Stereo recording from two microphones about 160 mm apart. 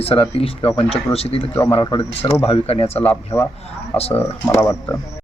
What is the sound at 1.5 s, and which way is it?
Speech, 15° left (ahead or behind).